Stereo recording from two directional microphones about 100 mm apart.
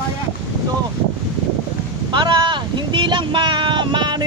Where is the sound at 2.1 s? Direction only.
45° right (ahead or behind).